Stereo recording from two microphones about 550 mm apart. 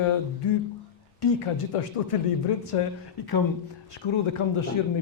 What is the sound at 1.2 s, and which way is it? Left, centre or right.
Speech, left.